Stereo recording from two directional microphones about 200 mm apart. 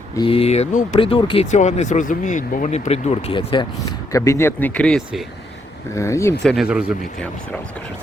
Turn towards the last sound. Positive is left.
turn(degrees=-5)  # may be behind; listen again after turning